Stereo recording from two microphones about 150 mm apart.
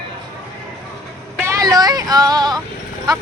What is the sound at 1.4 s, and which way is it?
Speech, 20° right (ahead or behind).